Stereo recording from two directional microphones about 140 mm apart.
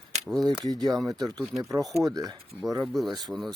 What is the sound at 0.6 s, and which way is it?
Speech, 30° right (ahead or behind).